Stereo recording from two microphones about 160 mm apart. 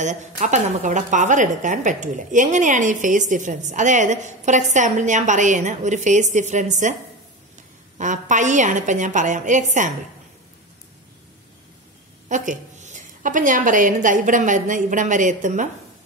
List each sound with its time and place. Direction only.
0.0 s a woman's voice: 50° right (ahead or behind)
8.0 s a woman's voice: 50° right (ahead or behind)
12.3 s a woman's voice: 50° right (ahead or behind)